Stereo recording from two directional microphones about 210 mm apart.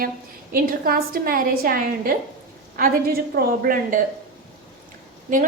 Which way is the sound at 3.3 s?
45° right (ahead or behind).